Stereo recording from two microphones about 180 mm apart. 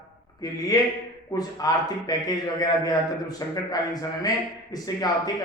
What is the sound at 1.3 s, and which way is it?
A man's voice, 20° left (ahead or behind).